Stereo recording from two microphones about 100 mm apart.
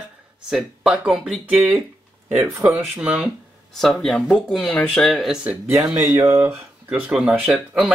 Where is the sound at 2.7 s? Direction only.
15° right (ahead or behind).